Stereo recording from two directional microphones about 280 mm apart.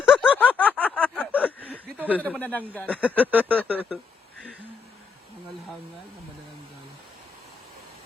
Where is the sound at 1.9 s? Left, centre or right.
Centre.